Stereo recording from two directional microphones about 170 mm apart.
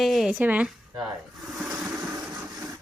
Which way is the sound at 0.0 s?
Centre (ahead or behind).